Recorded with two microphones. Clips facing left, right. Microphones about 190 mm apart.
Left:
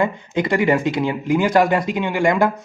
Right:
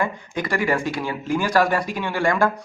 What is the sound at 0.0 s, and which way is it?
Speech, 20° left (ahead or behind).